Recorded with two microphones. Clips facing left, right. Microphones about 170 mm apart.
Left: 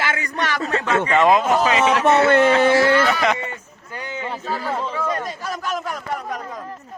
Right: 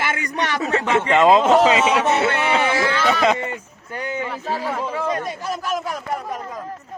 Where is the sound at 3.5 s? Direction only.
10° right (ahead or behind).